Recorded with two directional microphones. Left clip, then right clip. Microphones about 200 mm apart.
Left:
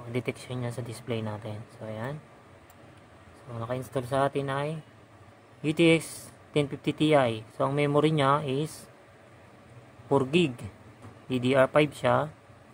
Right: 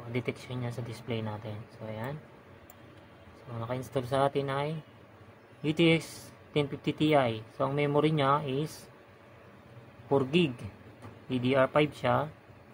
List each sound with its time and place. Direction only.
0.1 s speech: 20° left (ahead or behind)
3.5 s speech: 10° left (ahead or behind)
10.0 s a man's voice: 20° left (ahead or behind)